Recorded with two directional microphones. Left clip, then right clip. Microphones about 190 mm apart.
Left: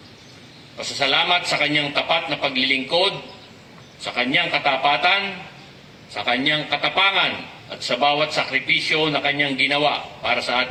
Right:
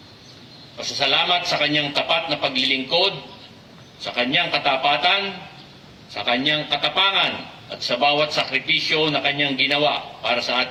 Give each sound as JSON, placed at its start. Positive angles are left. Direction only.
{"t": 0.8, "sound": "a man's voice", "side_deg": -25}
{"t": 4.1, "sound": "a man's voice", "side_deg": -25}